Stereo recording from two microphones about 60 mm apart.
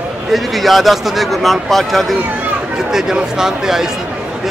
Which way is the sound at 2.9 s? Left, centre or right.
Centre.